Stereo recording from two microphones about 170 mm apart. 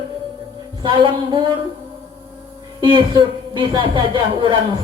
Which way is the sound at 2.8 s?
25° right (ahead or behind).